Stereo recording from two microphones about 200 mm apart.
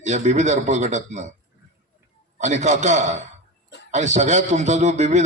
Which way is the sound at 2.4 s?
35° right (ahead or behind).